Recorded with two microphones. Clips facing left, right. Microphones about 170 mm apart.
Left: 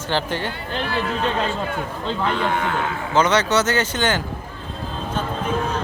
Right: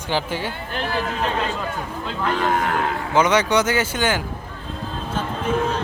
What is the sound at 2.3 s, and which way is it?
Speech, 40° right (ahead or behind).